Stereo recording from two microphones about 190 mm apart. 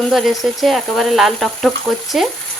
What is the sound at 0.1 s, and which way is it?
Sizzle, centre (ahead or behind).